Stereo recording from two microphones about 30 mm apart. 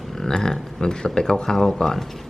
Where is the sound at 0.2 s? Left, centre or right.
Centre.